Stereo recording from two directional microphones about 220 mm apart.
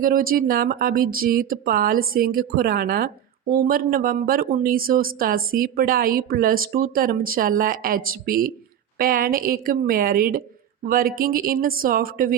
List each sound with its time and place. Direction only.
0.0 s speech: 40° right (ahead or behind)